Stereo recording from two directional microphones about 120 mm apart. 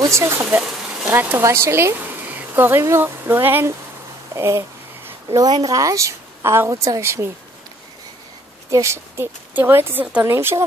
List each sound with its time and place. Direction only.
0.0 s a woman's voice: 25° right (ahead or behind)
0.7 s a sound: 5° right (ahead or behind)
1.1 s a woman's voice: 15° right (ahead or behind)
8.6 s a woman's voice: 25° right (ahead or behind)